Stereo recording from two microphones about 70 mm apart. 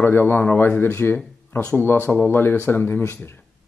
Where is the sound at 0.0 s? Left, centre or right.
Left.